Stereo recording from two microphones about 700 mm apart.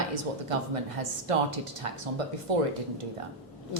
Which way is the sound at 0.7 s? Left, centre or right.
Right.